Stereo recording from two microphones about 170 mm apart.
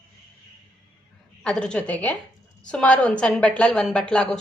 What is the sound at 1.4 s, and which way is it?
A woman's voice, 5° left (ahead or behind).